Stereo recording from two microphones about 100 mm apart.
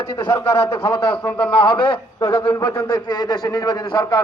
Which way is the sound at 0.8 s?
60° left (ahead or behind).